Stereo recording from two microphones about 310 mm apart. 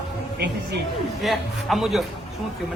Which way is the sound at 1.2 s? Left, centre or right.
Centre.